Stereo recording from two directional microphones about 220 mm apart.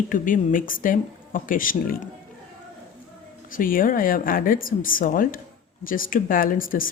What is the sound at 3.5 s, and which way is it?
Speech, 40° left (ahead or behind).